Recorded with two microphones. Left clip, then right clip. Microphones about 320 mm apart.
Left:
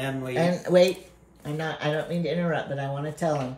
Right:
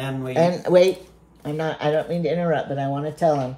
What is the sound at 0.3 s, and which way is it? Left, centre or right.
A woman's voice, right.